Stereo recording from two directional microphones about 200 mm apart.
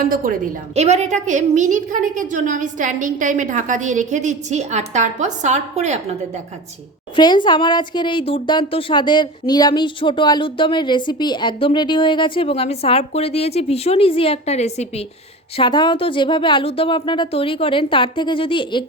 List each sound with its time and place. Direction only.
0.0 s a woman's voice: 45° right (ahead or behind)
7.2 s a woman's voice: 20° left (ahead or behind)
15.5 s a woman's voice: 25° left (ahead or behind)